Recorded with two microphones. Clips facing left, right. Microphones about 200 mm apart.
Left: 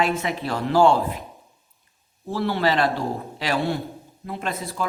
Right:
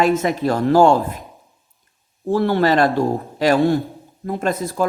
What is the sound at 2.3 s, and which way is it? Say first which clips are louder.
Speech: right 6 dB; 50° right (ahead or behind).